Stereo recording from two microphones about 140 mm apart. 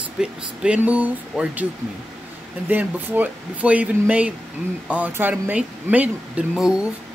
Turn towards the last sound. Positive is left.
turn(degrees=-5)  # may be behind; listen again after turning